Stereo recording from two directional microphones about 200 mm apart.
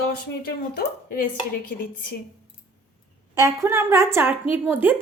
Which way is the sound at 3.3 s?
15° right (ahead or behind).